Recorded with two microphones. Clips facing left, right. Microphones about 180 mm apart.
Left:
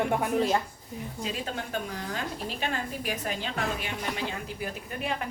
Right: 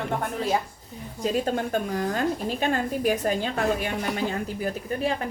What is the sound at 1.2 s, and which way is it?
A woman's voice, 45° right (ahead or behind).